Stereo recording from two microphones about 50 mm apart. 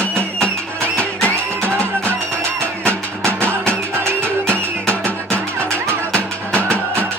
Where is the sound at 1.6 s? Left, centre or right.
Right.